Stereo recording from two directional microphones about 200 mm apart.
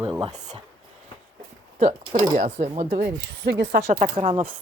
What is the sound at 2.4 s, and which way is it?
Speech, 35° right (ahead or behind).